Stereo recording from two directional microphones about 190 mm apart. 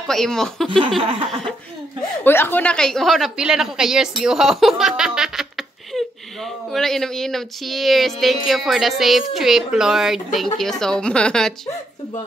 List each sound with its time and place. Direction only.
0.1 s a woman's voice: centre (ahead or behind)
0.7 s a sound: 25° right (ahead or behind)
2.2 s a woman's voice: 10° left (ahead or behind)